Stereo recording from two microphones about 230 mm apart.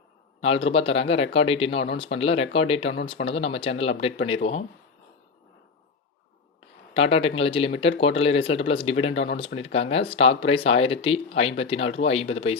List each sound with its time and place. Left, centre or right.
0.4 s speech: left
6.9 s speech: left